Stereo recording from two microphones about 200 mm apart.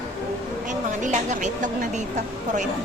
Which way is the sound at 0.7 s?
35° right (ahead or behind).